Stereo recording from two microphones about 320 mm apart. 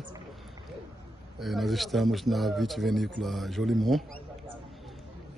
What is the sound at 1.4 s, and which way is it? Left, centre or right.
Speech, centre.